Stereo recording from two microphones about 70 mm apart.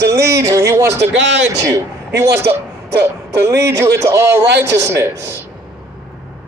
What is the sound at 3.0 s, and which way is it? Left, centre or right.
Speech, right.